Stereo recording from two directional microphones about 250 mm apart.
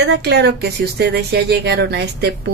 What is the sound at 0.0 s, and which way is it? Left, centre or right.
A woman's voice, right.